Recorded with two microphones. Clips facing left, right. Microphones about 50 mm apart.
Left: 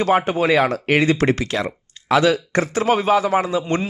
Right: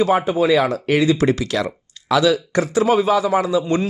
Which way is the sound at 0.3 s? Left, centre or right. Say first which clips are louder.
Right 1 dB; left.